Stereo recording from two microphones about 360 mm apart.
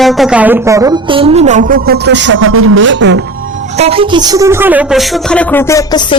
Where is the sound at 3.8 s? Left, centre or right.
Centre.